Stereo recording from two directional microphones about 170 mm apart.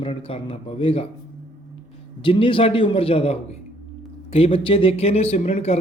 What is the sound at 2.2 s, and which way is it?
Speech, 30° left (ahead or behind).